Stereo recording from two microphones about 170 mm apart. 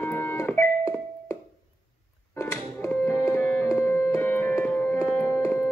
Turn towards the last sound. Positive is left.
turn(degrees=15)  # may be behind; listen again after turning